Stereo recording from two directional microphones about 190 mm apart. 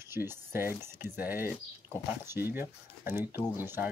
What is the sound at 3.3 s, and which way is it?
Speech, 20° left (ahead or behind).